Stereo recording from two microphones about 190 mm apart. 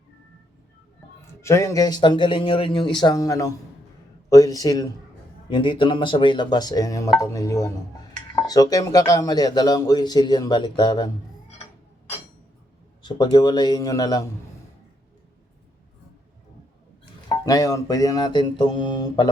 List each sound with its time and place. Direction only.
1.4 s speech: 15° left (ahead or behind)
13.0 s speech: 25° left (ahead or behind)
17.2 s speech: 20° left (ahead or behind)